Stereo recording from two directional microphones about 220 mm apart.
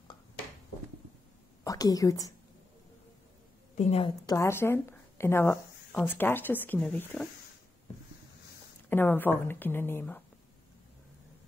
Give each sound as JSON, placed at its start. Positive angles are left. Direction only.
{"t": 1.6, "sound": "speech", "side_deg": 15}
{"t": 3.7, "sound": "a woman's voice", "side_deg": 30}
{"t": 4.3, "sound": "speech", "side_deg": 10}
{"t": 8.8, "sound": "speech", "side_deg": 10}